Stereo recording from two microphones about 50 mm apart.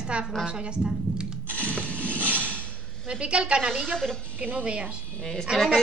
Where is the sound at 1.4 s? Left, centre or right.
Left.